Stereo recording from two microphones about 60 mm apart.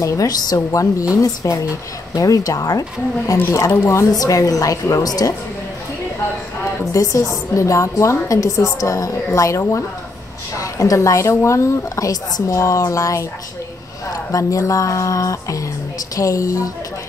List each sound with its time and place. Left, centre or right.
0.0 s a woman's voice: left
3.4 s a woman's voice: left
3.9 s a woman's voice: left
6.8 s a woman's voice: left
10.6 s a woman's voice: left